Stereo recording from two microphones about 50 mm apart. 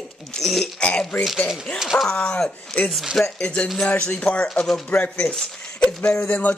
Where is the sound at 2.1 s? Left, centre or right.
Centre.